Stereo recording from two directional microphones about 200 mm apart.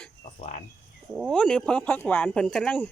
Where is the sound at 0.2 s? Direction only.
40° left (ahead or behind).